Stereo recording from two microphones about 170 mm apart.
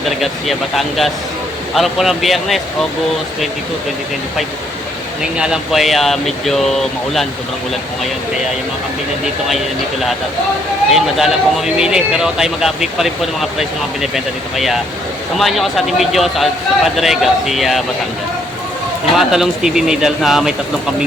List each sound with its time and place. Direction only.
0.2 s speech: centre (ahead or behind)
5.4 s speech: 5° right (ahead or behind)
10.9 s speech: centre (ahead or behind)
19.1 s speech: 5° right (ahead or behind)